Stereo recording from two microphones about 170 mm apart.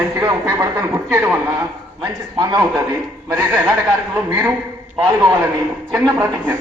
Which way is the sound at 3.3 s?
15° right (ahead or behind).